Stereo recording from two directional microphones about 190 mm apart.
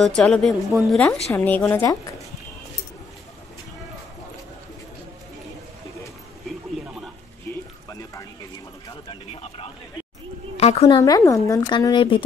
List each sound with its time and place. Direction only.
0.0 s a woman's voice: 5° left (ahead or behind)
9.3 s a sound: 30° left (ahead or behind)
10.6 s a woman's voice: 35° left (ahead or behind)
11.0 s speech: 20° left (ahead or behind)